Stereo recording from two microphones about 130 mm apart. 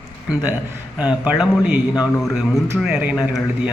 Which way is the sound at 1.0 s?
10° right (ahead or behind).